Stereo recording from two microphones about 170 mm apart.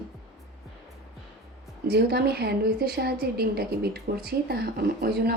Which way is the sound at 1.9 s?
70° right (ahead or behind).